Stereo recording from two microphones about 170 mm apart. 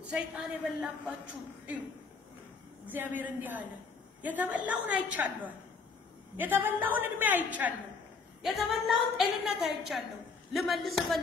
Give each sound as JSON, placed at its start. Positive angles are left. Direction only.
{"t": 0.1, "sound": "a woman's voice", "side_deg": -5}
{"t": 2.9, "sound": "a woman's voice", "side_deg": -10}